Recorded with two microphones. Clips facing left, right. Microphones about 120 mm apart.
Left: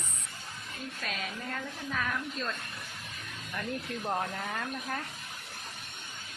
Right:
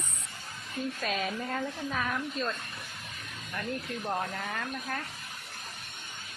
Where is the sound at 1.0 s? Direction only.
25° right (ahead or behind).